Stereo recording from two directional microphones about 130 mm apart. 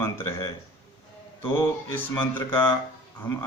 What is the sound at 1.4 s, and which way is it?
Mantra, 15° left (ahead or behind).